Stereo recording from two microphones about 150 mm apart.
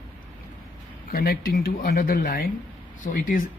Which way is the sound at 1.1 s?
80° left.